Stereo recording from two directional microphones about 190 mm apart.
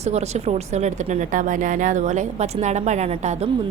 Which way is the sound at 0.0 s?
35° right (ahead or behind).